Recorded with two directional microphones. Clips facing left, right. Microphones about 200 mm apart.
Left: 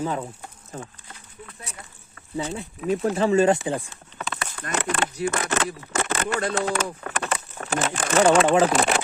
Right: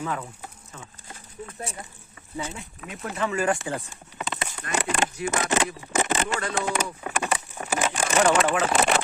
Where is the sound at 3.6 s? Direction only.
15° left (ahead or behind).